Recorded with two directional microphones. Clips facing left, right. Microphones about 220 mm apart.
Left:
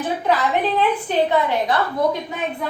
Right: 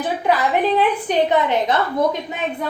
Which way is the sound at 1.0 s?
20° right (ahead or behind).